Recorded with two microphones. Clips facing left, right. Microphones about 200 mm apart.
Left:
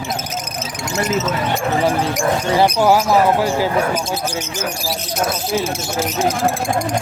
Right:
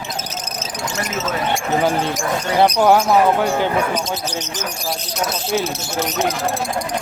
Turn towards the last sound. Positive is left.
turn(degrees=30)  # may be behind; listen again after turning